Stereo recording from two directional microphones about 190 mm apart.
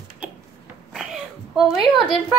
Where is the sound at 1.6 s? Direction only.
Centre (ahead or behind).